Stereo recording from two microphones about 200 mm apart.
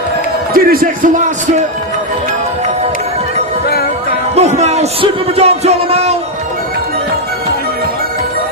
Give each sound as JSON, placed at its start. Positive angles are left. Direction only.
{"t": 0.5, "sound": "speech", "side_deg": -45}
{"t": 4.4, "sound": "music", "side_deg": -35}